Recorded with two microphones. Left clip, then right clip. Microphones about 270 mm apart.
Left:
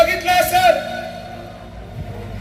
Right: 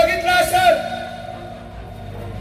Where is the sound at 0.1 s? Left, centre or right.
Left.